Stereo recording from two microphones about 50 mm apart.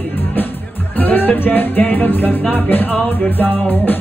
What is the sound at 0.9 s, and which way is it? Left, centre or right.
Music, left.